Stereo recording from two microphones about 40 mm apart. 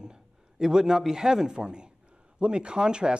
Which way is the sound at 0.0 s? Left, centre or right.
Centre.